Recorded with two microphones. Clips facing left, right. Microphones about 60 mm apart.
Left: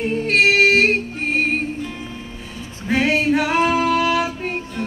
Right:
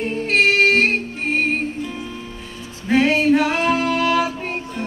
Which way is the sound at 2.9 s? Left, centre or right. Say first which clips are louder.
Right 2 dB; centre.